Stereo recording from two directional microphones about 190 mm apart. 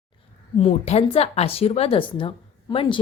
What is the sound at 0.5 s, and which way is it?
A woman's voice, 35° left (ahead or behind).